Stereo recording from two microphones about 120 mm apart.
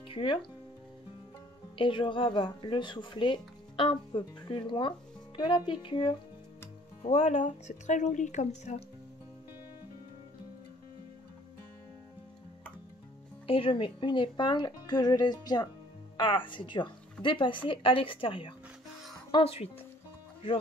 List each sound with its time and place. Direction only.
0.1 s speech: 45° left (ahead or behind)
1.8 s speech: 45° left (ahead or behind)
7.0 s speech: 65° left (ahead or behind)
13.5 s speech: 45° left (ahead or behind)